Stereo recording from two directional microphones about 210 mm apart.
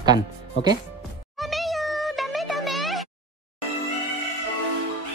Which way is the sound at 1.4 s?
Centre (ahead or behind).